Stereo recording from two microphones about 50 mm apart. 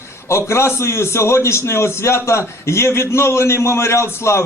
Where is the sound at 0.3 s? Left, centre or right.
Left.